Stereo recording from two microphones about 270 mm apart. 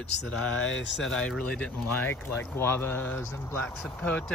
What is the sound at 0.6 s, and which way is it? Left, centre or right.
Speech, left.